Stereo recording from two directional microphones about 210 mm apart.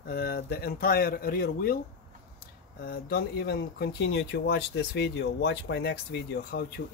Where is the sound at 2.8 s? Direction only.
50° left (ahead or behind).